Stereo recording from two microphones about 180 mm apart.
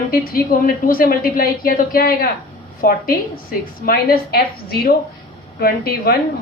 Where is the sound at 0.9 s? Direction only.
55° left (ahead or behind).